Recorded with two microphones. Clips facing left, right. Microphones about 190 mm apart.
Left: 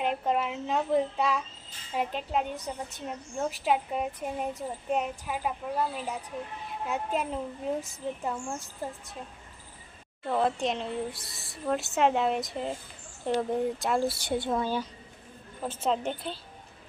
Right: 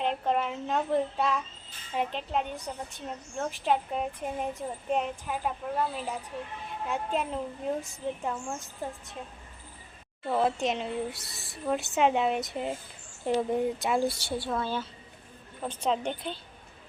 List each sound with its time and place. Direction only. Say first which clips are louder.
0.0 s a woman's voice: even; 5° left (ahead or behind)
10.2 s a woman's voice: even; centre (ahead or behind)
14.2 s a woman's voice: left 3 dB; 20° left (ahead or behind); by 16.4 s centre (ahead or behind)